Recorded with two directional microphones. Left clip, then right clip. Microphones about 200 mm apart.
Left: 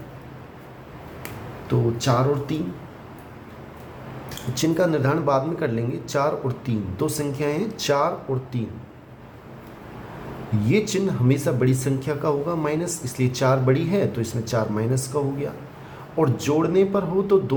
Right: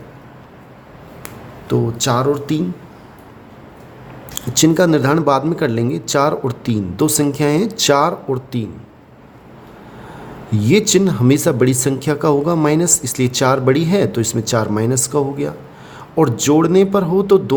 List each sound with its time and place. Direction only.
1.6 s speech: 55° right (ahead or behind)
4.4 s speech: 60° right (ahead or behind)
10.6 s speech: 55° right (ahead or behind)